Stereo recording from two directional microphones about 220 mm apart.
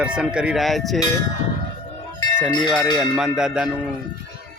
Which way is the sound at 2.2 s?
15° left (ahead or behind).